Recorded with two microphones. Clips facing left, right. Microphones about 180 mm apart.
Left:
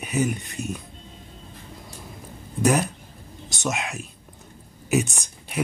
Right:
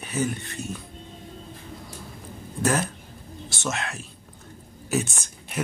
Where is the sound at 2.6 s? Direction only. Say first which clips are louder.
Left 3 dB; 15° left (ahead or behind).